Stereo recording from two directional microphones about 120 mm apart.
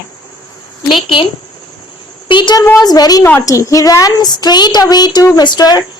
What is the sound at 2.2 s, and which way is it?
A woman's voice, 40° left (ahead or behind).